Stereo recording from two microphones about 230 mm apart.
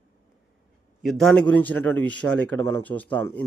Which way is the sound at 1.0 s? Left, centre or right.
Centre.